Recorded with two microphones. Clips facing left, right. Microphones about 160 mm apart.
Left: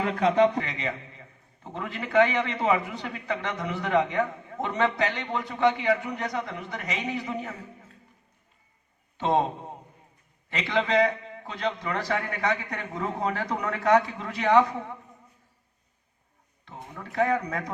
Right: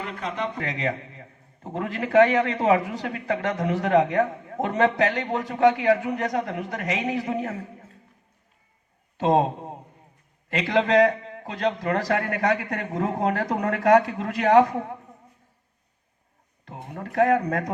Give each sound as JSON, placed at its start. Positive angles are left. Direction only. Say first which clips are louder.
{"t": 0.2, "sound": "speech", "louder": "left 10 dB", "side_deg": 85}
{"t": 0.6, "sound": "a man's voice", "louder": "right 5 dB", "side_deg": -45}
{"t": 9.1, "sound": "a man's voice", "louder": "right 4 dB", "side_deg": -40}
{"t": 10.7, "sound": "a man's voice", "louder": "right 4 dB", "side_deg": -45}
{"t": 12.2, "sound": "speech", "louder": "right 5 dB", "side_deg": -60}
{"t": 13.0, "sound": "a man's voice", "louder": "right 5 dB", "side_deg": -45}
{"t": 16.6, "sound": "a sound", "louder": "right 4 dB", "side_deg": -55}
{"t": 17.1, "sound": "a man's voice", "louder": "right 5 dB", "side_deg": -50}